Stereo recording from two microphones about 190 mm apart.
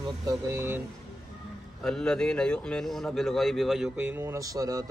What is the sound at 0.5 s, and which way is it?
Speech, 10° right (ahead or behind).